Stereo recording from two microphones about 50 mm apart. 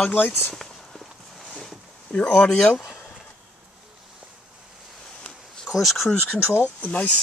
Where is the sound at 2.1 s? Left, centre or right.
Left.